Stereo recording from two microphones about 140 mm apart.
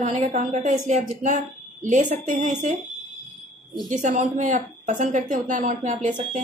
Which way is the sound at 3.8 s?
60° right (ahead or behind).